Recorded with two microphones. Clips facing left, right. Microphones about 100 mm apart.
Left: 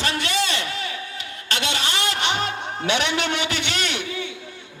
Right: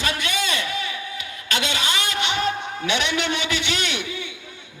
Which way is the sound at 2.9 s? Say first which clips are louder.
Left 1 dB; 30° left (ahead or behind).